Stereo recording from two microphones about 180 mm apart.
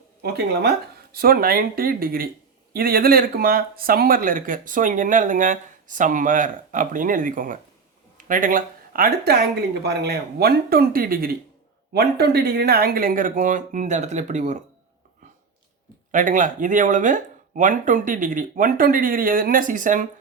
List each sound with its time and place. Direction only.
0.2 s speech: 60° right (ahead or behind); by 14.6 s 40° right (ahead or behind)
16.1 s speech: 45° right (ahead or behind)